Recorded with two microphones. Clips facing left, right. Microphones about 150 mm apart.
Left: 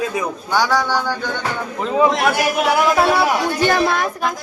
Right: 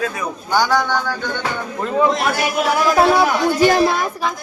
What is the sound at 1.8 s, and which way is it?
Speech, 15° left (ahead or behind).